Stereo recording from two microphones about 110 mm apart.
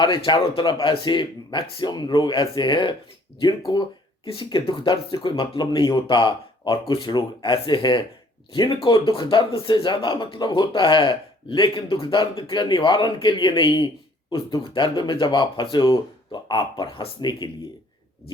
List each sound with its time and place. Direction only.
0.0 s speech: 45° left (ahead or behind)
4.3 s speech: 50° left (ahead or behind)